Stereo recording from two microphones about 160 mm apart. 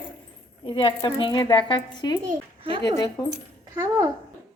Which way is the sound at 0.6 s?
30° left (ahead or behind).